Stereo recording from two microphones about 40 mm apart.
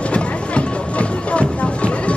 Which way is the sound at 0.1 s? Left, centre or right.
Left.